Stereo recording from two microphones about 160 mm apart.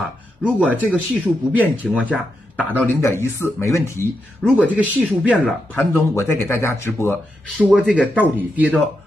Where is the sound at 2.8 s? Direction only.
15° left (ahead or behind).